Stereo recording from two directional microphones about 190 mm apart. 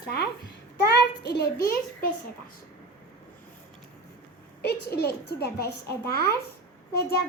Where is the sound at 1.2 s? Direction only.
60° left (ahead or behind).